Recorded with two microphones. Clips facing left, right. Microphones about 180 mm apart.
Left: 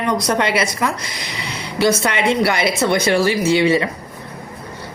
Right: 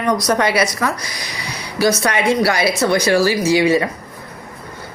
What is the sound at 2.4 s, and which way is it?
Speech, 25° left (ahead or behind).